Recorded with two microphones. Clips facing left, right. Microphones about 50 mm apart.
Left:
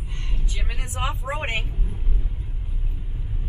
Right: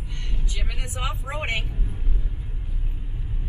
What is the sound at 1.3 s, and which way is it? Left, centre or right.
Speech, left.